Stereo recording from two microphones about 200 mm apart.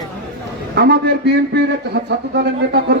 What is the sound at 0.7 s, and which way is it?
A man's voice, 55° right (ahead or behind).